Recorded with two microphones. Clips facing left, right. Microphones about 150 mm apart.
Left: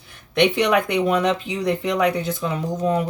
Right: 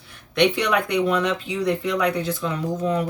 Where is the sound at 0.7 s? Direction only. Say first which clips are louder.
Left 2 dB; 45° left (ahead or behind).